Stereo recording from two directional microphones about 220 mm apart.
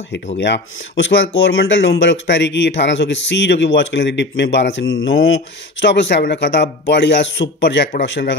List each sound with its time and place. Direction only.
0.4 s speech: 55° left (ahead or behind)